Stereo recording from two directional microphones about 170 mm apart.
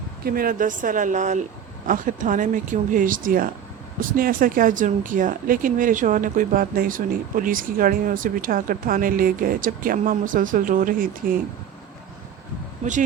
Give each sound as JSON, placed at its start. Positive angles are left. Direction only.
{"t": 0.3, "sound": "speech", "side_deg": -60}
{"t": 12.8, "sound": "speech", "side_deg": -45}